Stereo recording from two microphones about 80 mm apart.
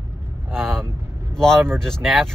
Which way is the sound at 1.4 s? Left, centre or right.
Centre.